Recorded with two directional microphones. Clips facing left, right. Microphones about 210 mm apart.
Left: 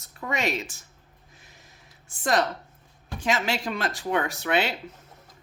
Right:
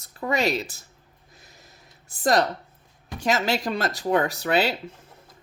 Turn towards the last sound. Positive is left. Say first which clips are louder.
# right 3 dB
turn(degrees=-35)  # may be behind; listen again after turning